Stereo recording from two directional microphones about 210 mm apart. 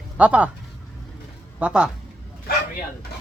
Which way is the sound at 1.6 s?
5° right (ahead or behind).